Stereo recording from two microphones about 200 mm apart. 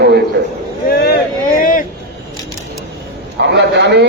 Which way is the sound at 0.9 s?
50° left (ahead or behind).